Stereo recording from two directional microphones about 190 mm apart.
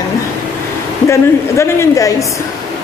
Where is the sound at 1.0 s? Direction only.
15° left (ahead or behind).